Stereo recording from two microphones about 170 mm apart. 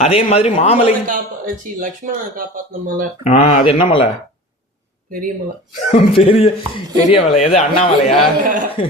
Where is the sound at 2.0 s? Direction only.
45° right (ahead or behind).